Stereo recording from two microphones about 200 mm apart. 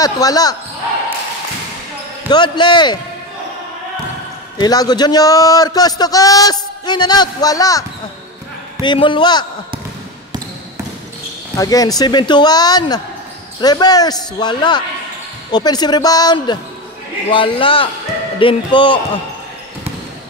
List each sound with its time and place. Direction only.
0.0 s a man's voice: 20° left (ahead or behind)
2.2 s a man's voice: 20° left (ahead or behind)
4.6 s a man's voice: 20° left (ahead or behind)
8.8 s a man's voice: 25° left (ahead or behind)
11.5 s a man's voice: 20° left (ahead or behind)